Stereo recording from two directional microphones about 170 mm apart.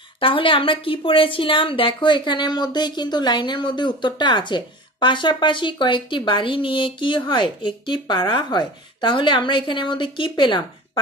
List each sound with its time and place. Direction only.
0.2 s a woman's voice: 30° left (ahead or behind)